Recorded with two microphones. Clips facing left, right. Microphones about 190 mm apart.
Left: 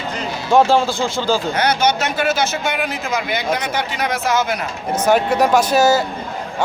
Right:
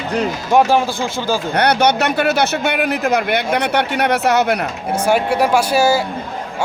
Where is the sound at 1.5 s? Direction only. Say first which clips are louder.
Right 3 dB; 60° right (ahead or behind).